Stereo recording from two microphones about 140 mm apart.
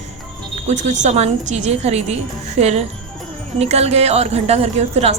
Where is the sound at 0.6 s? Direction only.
55° right (ahead or behind).